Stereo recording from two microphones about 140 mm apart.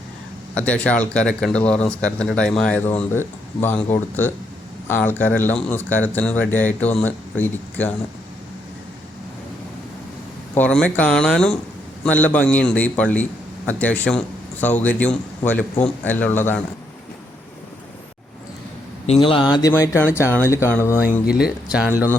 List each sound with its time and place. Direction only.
0.5 s speech: 10° left (ahead or behind)
4.9 s speech: 15° left (ahead or behind)
10.5 s speech: 10° left (ahead or behind)
19.0 s a man's voice: 45° left (ahead or behind)
19.7 s speech: 20° left (ahead or behind)
21.3 s speech: 5° right (ahead or behind)